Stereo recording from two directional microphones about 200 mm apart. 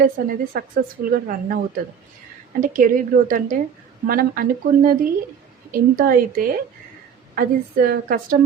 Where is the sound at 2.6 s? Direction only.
40° right (ahead or behind).